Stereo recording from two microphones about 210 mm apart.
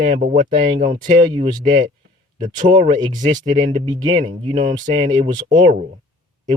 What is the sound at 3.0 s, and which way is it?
Speech, 20° right (ahead or behind).